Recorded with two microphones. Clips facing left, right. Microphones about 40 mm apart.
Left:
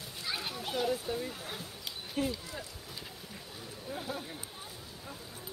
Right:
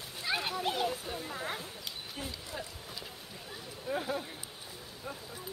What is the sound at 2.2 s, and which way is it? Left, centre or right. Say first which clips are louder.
Speech: left 11 dB; left.